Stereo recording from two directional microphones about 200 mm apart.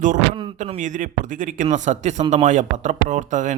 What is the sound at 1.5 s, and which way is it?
Speech, 40° right (ahead or behind).